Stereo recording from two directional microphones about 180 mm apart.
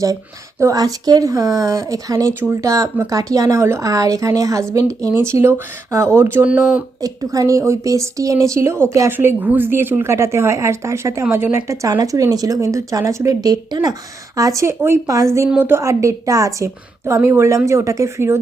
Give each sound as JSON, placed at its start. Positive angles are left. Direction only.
{"t": 0.6, "sound": "a woman's voice", "side_deg": -20}
{"t": 7.0, "sound": "a woman's voice", "side_deg": -20}